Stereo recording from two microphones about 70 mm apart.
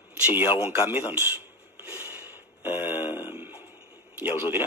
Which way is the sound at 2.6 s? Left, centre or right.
Right.